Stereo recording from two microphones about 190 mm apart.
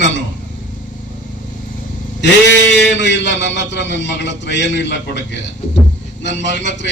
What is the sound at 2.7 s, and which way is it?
A man's voice, 70° left (ahead or behind).